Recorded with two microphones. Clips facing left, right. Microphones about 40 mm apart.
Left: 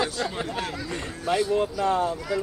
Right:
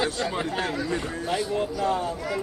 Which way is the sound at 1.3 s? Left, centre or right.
Left.